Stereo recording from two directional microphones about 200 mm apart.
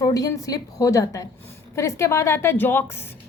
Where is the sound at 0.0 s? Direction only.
15° left (ahead or behind).